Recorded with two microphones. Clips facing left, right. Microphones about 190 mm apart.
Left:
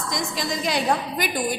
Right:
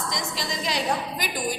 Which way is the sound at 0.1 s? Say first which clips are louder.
Left 4 dB; 50° left (ahead or behind).